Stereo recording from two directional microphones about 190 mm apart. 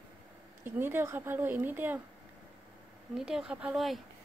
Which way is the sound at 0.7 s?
10° right (ahead or behind).